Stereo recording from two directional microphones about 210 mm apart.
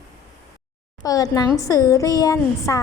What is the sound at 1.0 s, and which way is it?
A woman's voice, 15° left (ahead or behind).